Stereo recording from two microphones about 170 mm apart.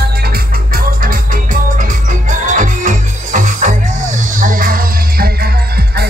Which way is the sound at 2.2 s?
50° right (ahead or behind).